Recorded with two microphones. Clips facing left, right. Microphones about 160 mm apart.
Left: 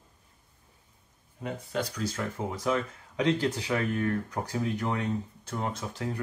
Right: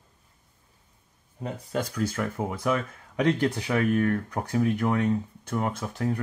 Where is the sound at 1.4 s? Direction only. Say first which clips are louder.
Right 2 dB; 45° right (ahead or behind).